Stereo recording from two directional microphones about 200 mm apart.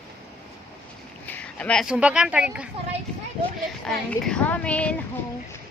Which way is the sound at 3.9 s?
5° left (ahead or behind).